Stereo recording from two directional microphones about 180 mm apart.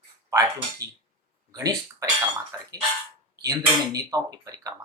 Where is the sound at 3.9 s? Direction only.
20° right (ahead or behind).